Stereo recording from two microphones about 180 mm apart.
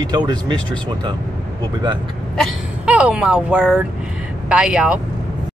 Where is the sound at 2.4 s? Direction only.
Centre (ahead or behind).